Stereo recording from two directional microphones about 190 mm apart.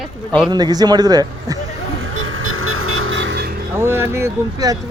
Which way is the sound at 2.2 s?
90° right.